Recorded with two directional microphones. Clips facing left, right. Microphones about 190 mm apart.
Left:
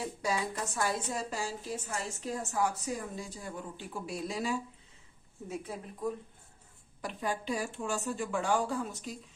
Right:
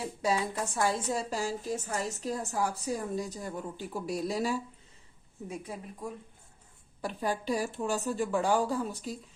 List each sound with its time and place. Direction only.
0.2 s speech: 25° right (ahead or behind)
1.4 s a woman's voice: 45° right (ahead or behind)
5.5 s speech: 10° right (ahead or behind)
7.0 s a woman's voice: 35° right (ahead or behind)